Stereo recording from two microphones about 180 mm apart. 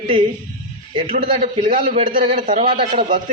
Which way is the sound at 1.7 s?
35° right (ahead or behind).